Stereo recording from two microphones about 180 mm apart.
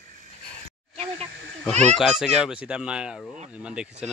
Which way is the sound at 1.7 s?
40° right (ahead or behind).